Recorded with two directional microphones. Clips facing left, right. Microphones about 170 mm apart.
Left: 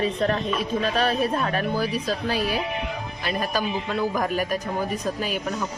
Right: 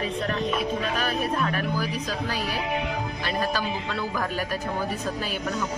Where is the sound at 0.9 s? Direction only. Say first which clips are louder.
Left 4 dB; 30° left (ahead or behind); by 4.4 s 15° left (ahead or behind).